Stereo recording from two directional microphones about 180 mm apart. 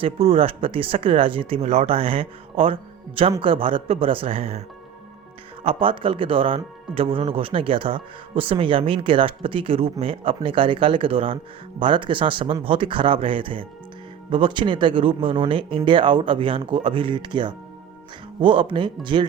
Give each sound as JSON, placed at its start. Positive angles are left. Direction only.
{"t": 0.0, "sound": "speech", "side_deg": -30}
{"t": 5.6, "sound": "speech", "side_deg": -30}